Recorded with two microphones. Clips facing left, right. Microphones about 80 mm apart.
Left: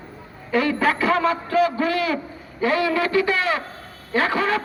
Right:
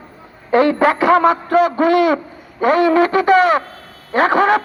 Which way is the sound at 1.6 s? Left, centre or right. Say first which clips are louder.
Right 7 dB; right.